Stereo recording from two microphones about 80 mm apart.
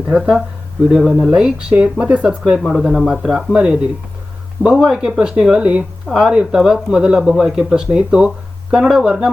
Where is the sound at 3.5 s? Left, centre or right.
Centre.